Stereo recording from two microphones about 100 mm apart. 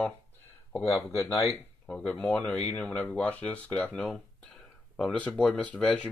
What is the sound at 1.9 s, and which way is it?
Speech, 10° left (ahead or behind).